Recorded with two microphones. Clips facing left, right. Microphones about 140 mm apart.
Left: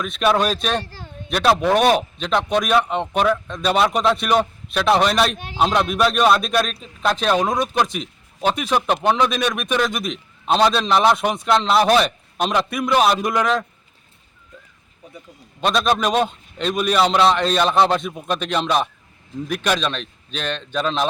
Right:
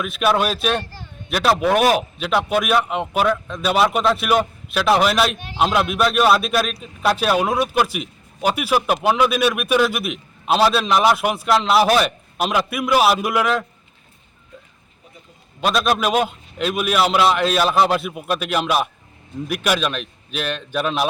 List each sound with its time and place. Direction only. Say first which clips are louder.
0.0 s a man's voice: even; 5° right (ahead or behind)
15.6 s a man's voice: even; 5° right (ahead or behind)